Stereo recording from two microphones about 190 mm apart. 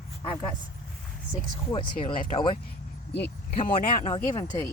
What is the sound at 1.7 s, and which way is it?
Speech, 25° left (ahead or behind).